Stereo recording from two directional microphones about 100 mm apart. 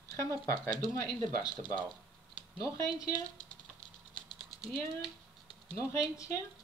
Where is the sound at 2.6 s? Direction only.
35° left (ahead or behind).